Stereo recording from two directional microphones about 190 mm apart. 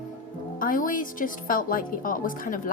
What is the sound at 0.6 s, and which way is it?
Speech, 45° left (ahead or behind).